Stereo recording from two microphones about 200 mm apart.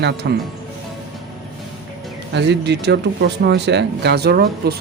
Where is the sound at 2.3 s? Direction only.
60° right (ahead or behind).